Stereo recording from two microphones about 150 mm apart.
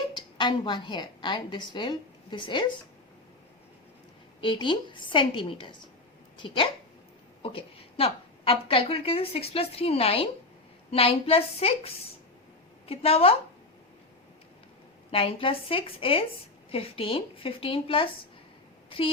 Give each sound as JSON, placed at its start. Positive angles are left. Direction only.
{"t": 0.2, "sound": "a woman's voice", "side_deg": 30}
{"t": 4.4, "sound": "a woman's voice", "side_deg": 35}
{"t": 15.1, "sound": "a woman's voice", "side_deg": 40}